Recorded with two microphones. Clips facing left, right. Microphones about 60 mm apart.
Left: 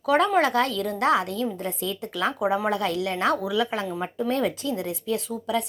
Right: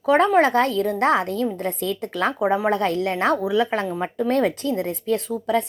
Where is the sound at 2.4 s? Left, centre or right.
Right.